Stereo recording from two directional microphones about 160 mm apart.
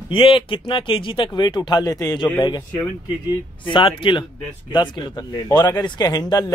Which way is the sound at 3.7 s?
30° left (ahead or behind).